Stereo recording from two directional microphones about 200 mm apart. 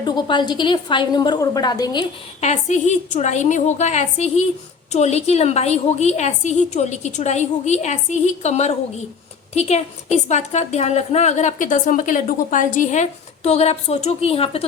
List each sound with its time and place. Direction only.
0.0 s a woman's voice: 20° left (ahead or behind)
2.4 s a woman's voice: 35° left (ahead or behind)